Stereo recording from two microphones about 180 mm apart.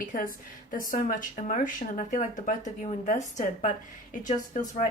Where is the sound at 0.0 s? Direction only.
45° left (ahead or behind).